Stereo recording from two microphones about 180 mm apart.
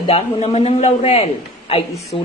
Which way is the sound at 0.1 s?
35° left (ahead or behind).